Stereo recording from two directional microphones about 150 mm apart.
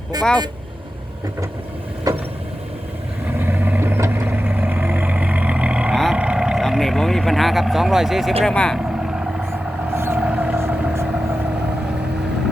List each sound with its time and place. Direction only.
0.1 s speech: 25° right (ahead or behind)
2.1 s vehicle: 25° right (ahead or behind)
3.2 s vehicle: 15° right (ahead or behind)
8.4 s speech: 5° left (ahead or behind)
8.8 s vehicle: 5° right (ahead or behind)
9.9 s vehicle: 15° right (ahead or behind)